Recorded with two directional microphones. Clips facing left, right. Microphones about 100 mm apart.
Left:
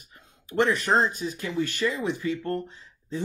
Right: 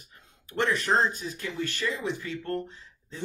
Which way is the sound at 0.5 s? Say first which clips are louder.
Left 3 dB; 15° left (ahead or behind).